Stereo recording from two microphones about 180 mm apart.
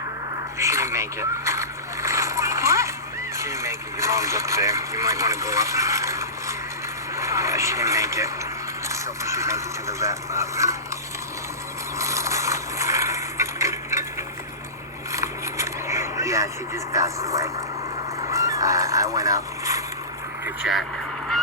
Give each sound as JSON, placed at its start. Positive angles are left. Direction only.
{"t": 0.6, "sound": "a sound", "side_deg": -15}
{"t": 3.3, "sound": "speech", "side_deg": -15}
{"t": 11.9, "sound": "a sound", "side_deg": -15}
{"t": 15.1, "sound": "vehicle", "side_deg": -15}
{"t": 18.3, "sound": "fowl", "side_deg": -20}
{"t": 20.4, "sound": "speech", "side_deg": -5}